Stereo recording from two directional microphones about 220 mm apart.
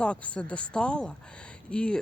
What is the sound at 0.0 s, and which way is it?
Speech, 5° left (ahead or behind).